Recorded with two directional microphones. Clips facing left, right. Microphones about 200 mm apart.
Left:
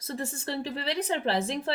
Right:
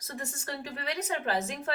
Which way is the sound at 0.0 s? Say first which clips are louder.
Left 6 dB; 30° left (ahead or behind).